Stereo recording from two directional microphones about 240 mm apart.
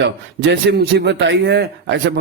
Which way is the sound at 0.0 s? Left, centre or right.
Right.